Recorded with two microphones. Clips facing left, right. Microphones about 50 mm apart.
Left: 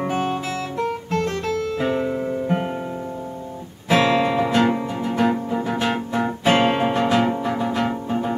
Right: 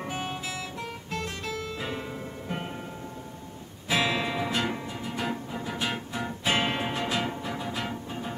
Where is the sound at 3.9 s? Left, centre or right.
Left.